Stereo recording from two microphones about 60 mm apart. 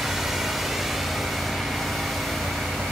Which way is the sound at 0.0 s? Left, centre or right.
Centre.